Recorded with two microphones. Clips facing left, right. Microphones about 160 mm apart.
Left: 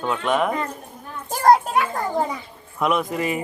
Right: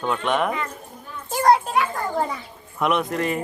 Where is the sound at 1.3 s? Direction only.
45° left (ahead or behind).